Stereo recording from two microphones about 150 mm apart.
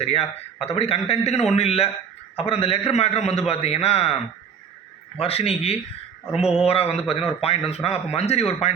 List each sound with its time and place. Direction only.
0.0 s a man's voice: 45° left (ahead or behind)
6.3 s speech: 5° right (ahead or behind)
6.6 s a man's voice: 40° left (ahead or behind)